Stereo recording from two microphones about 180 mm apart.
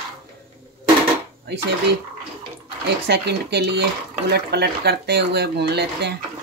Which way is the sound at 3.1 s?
65° right (ahead or behind).